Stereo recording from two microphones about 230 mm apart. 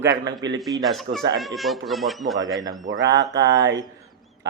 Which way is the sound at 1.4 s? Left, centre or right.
Centre.